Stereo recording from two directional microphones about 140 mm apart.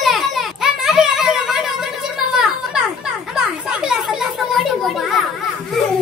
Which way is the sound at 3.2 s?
5° right (ahead or behind).